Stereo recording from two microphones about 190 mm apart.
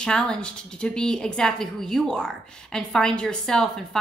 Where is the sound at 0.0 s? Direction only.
5° left (ahead or behind).